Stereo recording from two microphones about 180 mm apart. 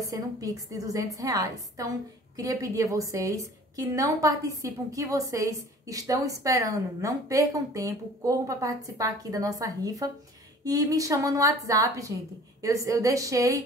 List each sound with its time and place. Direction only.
0.0 s a woman's voice: 20° right (ahead or behind)